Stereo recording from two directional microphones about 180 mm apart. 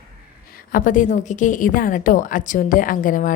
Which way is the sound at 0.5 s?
50° left (ahead or behind).